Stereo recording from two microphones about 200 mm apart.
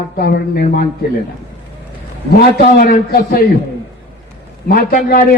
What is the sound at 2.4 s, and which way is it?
A man's voice, 45° left (ahead or behind).